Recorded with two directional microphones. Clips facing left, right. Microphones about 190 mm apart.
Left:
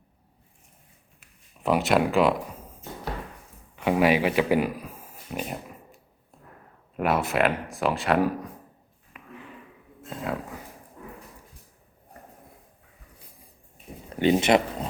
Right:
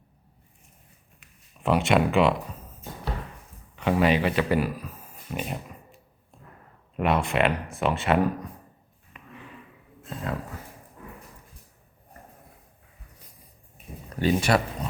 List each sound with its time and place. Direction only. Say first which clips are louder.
1.2 s speech: even; 5° left (ahead or behind)
3.8 s speech: left 1 dB; 10° left (ahead or behind)
6.3 s a sound: right 1 dB; centre (ahead or behind)
6.9 s speech: even; centre (ahead or behind)
9.1 s a sound: left 1 dB; 5° left (ahead or behind)
14.1 s speech: left 3 dB; 25° left (ahead or behind)